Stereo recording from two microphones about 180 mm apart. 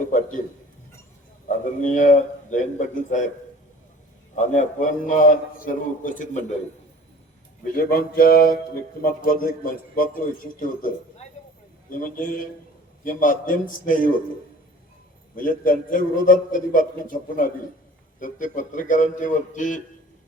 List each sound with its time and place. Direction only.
0.1 s a sound: 45° left (ahead or behind)
1.5 s speech: 45° left (ahead or behind)
4.4 s speech: 45° left (ahead or behind)
7.8 s speech: 55° left (ahead or behind)
15.4 s speech: 50° left (ahead or behind)